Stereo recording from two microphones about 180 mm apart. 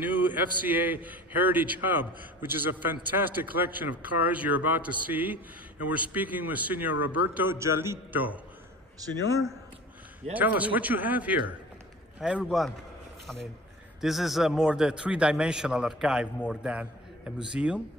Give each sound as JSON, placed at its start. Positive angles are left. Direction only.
{"t": 0.0, "sound": "a man's voice", "side_deg": -10}
{"t": 9.0, "sound": "a man's voice", "side_deg": -20}
{"t": 10.3, "sound": "a man's voice", "side_deg": -10}
{"t": 14.0, "sound": "a man's voice", "side_deg": 0}